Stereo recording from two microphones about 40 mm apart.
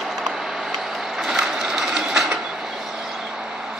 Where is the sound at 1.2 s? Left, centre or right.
Centre.